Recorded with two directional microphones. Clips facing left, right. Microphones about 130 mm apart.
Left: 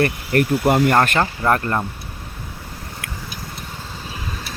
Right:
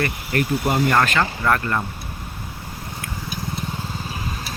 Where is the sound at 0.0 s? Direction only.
50° left (ahead or behind).